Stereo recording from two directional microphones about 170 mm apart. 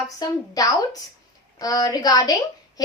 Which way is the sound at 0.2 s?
20° left (ahead or behind).